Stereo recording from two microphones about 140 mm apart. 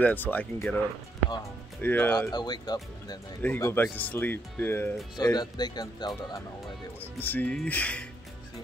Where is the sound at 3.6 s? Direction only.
15° left (ahead or behind).